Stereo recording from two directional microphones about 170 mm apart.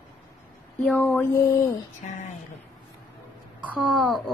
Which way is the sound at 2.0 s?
40° left (ahead or behind).